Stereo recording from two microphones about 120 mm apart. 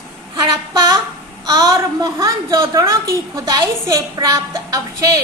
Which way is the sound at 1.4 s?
30° right (ahead or behind).